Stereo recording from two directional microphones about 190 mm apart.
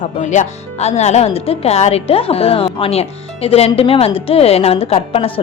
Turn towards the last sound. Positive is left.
turn(degrees=30)  # may be behind; listen again after turning